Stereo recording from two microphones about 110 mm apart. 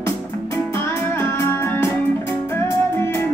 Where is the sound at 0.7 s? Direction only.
25° left (ahead or behind).